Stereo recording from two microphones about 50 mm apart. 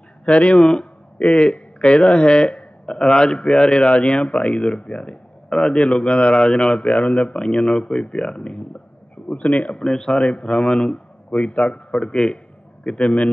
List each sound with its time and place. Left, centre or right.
0.2 s a man's voice: left